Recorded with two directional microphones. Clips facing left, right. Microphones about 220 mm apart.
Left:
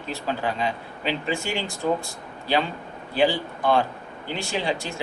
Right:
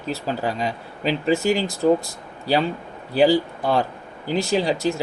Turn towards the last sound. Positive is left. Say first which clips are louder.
# right 6 dB
turn(degrees=-40)  # may be behind; listen again after turning